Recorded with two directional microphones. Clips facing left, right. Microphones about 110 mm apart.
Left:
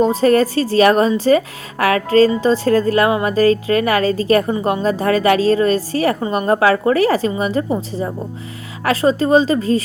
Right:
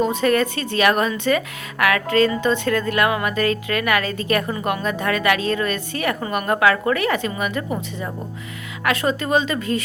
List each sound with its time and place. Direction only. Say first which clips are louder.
0.0 s a woman's voice: left 5 dB; 35° left (ahead or behind)